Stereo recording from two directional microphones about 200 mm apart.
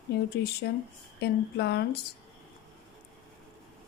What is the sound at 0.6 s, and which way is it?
Speech, 55° left (ahead or behind).